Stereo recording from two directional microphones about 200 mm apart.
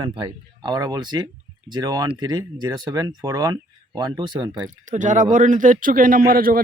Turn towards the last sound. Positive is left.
turn(degrees=-45)  # may be behind; listen again after turning